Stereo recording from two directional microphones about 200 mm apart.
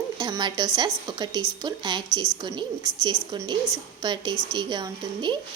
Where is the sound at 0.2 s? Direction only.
20° right (ahead or behind).